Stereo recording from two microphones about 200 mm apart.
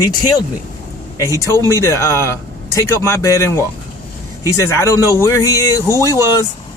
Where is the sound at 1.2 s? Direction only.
15° left (ahead or behind).